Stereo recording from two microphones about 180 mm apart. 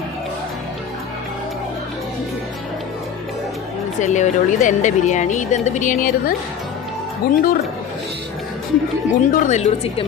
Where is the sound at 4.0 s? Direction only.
40° left (ahead or behind).